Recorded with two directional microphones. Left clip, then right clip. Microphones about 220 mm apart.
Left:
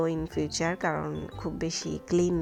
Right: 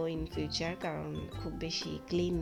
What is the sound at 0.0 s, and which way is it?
Speech, 20° left (ahead or behind).